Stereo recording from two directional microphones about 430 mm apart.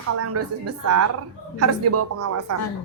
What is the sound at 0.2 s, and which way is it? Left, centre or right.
A woman's voice, right.